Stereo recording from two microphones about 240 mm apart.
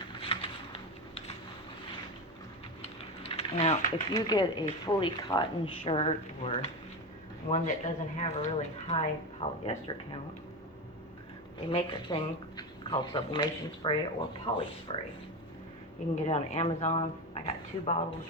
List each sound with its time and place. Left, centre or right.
0.1 s a sound: left
2.8 s typing: left
4.2 s speech: centre
11.7 s speech: left
16.2 s speech: left